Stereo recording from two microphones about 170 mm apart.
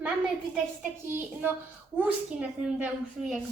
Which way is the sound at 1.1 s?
10° right (ahead or behind).